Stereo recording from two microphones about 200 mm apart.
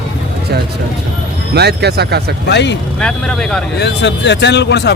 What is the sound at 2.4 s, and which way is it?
Speech, 60° left (ahead or behind).